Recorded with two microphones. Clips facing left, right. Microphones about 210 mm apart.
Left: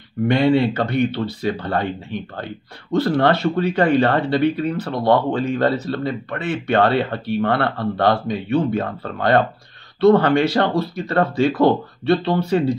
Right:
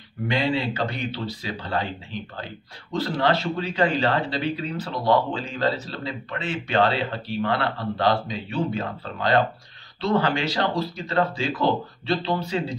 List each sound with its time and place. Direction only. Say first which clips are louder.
0.3 s speech: left 8 dB; 60° left (ahead or behind)